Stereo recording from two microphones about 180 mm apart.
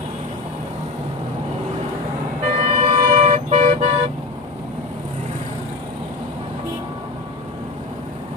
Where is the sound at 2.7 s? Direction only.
35° right (ahead or behind).